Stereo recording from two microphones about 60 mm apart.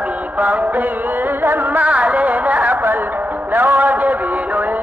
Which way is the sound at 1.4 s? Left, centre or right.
Right.